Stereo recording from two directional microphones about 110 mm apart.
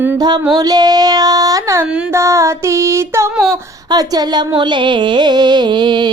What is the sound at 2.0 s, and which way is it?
Music, 25° right (ahead or behind).